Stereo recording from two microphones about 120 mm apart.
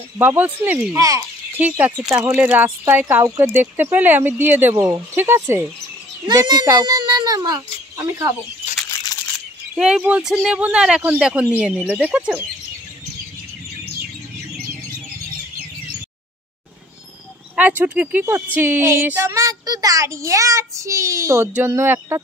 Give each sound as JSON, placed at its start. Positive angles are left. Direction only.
{"t": 0.2, "sound": "speech", "side_deg": -15}
{"t": 0.9, "sound": "child singing", "side_deg": -30}
{"t": 1.6, "sound": "speech", "side_deg": -15}
{"t": 2.9, "sound": "child singing", "side_deg": -20}
{"t": 3.4, "sound": "speech", "side_deg": -15}
{"t": 6.2, "sound": "speech", "side_deg": -35}
{"t": 9.8, "sound": "speech", "side_deg": -5}
{"t": 17.6, "sound": "speech", "side_deg": -10}
{"t": 19.2, "sound": "child singing", "side_deg": -25}